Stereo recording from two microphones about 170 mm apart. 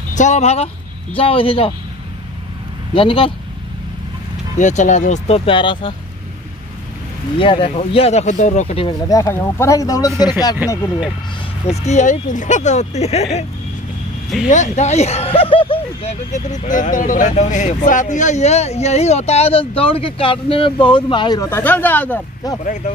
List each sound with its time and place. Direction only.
0.1 s speech: 45° left (ahead or behind)
2.9 s speech: 30° left (ahead or behind)
4.6 s speech: 45° left (ahead or behind); by 5.9 s 30° left (ahead or behind)
7.3 s speech: 30° left (ahead or behind)
9.1 s speech: 15° left (ahead or behind)
11.6 s speech: 40° left (ahead or behind)
14.5 s speech: 45° left (ahead or behind); by 21.5 s 25° left (ahead or behind)
21.5 s speech: 10° left (ahead or behind)